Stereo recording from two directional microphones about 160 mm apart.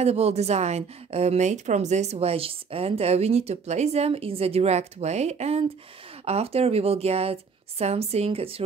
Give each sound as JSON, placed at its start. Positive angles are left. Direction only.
{"t": 0.0, "sound": "a woman's voice", "side_deg": -40}